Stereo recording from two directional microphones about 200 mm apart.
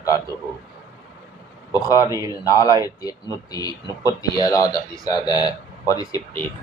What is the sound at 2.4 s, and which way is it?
Speech, 15° left (ahead or behind).